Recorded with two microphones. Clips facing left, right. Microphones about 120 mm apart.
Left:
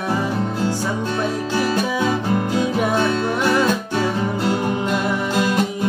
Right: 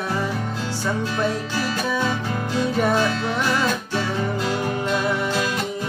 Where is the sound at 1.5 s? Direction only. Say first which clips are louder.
Left 4 dB; 15° left (ahead or behind).